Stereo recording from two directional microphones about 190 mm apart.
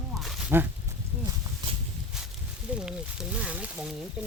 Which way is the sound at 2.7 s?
5° right (ahead or behind).